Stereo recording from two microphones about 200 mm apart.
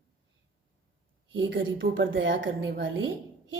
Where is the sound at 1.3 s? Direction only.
70° right (ahead or behind).